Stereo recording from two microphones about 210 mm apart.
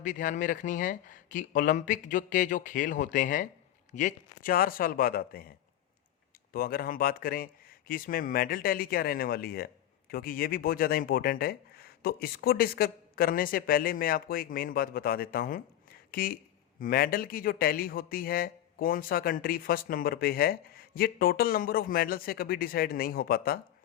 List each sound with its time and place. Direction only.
0.0 s speech: 40° left (ahead or behind)